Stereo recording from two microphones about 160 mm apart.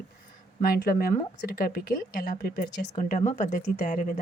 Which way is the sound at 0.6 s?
65° left (ahead or behind).